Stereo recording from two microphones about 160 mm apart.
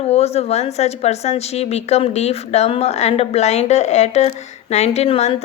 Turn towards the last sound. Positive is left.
turn(degrees=40)  # may be behind; listen again after turning